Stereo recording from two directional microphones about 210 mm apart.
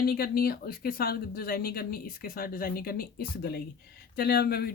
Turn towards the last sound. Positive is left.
turn(degrees=45)  # may be behind; listen again after turning